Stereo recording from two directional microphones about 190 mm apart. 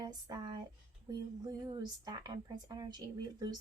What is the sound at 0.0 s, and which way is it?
A woman's voice, 20° right (ahead or behind).